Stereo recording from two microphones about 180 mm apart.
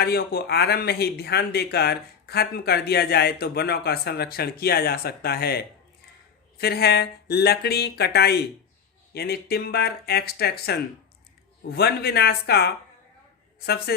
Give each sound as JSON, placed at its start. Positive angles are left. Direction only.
{"t": 0.0, "sound": "a man's voice", "side_deg": 60}